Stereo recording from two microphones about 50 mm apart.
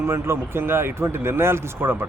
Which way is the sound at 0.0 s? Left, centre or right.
Right.